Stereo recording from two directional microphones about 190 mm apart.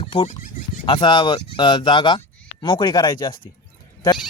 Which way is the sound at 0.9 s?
25° left (ahead or behind).